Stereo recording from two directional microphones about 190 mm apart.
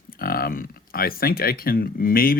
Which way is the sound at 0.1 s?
50° left (ahead or behind).